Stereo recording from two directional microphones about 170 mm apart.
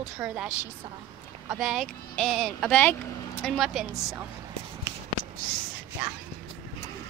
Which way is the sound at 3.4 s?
Centre (ahead or behind).